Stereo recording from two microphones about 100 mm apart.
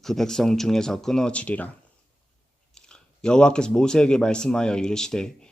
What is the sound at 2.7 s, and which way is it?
Speech, 10° left (ahead or behind).